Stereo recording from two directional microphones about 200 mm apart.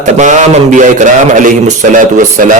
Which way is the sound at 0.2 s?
35° right (ahead or behind).